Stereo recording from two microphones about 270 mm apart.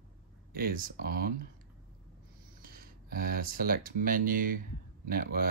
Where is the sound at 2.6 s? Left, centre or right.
Right.